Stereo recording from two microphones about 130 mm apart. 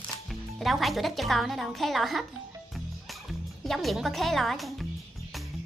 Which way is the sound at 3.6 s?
Centre (ahead or behind).